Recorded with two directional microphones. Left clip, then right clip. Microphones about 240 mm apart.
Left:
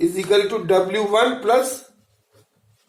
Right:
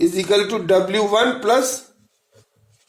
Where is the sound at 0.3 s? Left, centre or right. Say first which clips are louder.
Left 2 dB; right.